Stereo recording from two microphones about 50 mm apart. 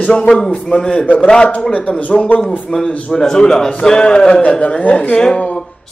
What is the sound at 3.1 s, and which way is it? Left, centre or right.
A man's voice, centre.